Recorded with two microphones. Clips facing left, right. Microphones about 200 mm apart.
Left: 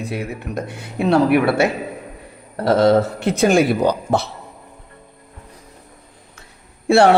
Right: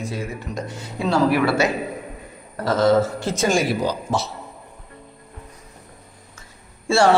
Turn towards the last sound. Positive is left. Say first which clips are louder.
# left 5 dB
turn(degrees=60)  # may be behind; listen again after turning